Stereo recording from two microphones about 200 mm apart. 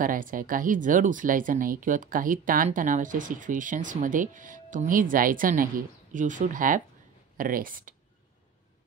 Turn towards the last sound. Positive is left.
turn(degrees=-45)  # may be behind; listen again after turning